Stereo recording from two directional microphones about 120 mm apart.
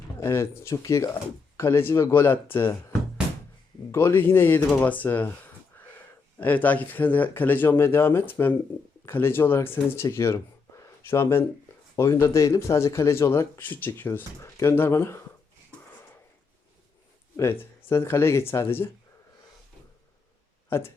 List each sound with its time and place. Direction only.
0.2 s speech: 20° left (ahead or behind)
3.9 s speech: 20° left (ahead or behind)
6.4 s speech: 15° left (ahead or behind)
17.3 s speech: 20° left (ahead or behind)
20.7 s speech: 20° left (ahead or behind)